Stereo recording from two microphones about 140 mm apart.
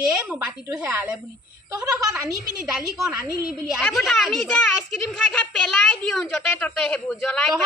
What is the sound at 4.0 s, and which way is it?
A child's voice, centre (ahead or behind).